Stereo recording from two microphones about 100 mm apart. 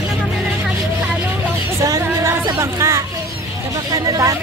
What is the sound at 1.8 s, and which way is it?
Music, 30° right (ahead or behind).